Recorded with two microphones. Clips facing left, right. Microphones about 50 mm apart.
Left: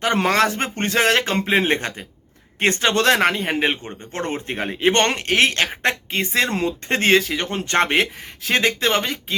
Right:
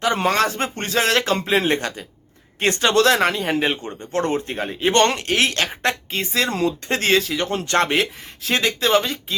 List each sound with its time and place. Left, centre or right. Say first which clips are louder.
0.2 s speech: left 1 dB; left
0.6 s speech: left 2 dB; left
4.1 s speech: right 5 dB; left
4.4 s speech: left 1 dB; left
4.9 s speech: right 1 dB; left
8.4 s speech: even; left